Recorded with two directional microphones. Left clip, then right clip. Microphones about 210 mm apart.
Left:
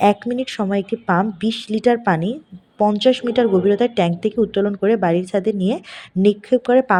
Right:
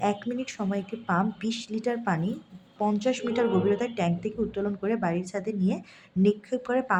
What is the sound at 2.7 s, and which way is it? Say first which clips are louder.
A woman's voice: left 11 dB; 25° left (ahead or behind).